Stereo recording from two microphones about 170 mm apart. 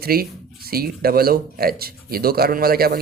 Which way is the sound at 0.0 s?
65° right (ahead or behind).